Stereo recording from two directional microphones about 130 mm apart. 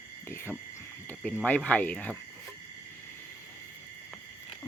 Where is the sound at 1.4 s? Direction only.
10° left (ahead or behind).